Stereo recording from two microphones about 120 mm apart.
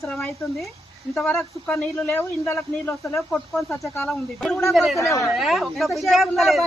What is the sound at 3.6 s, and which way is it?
Speech, 25° left (ahead or behind).